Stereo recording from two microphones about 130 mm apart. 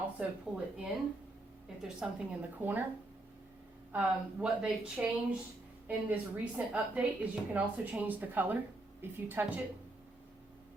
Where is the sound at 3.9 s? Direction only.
10° right (ahead or behind).